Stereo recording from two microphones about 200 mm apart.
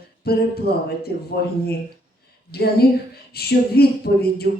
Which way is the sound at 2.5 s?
50° left (ahead or behind).